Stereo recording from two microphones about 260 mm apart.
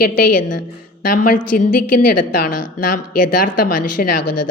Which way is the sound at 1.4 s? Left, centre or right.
Left.